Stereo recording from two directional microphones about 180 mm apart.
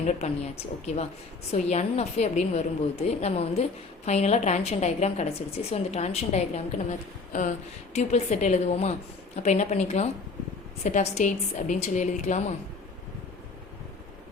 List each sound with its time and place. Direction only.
0.1 s a woman's voice: 35° left (ahead or behind)
7.9 s a woman's voice: 40° left (ahead or behind)